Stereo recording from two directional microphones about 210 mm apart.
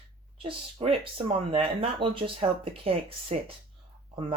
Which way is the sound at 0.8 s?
25° right (ahead or behind).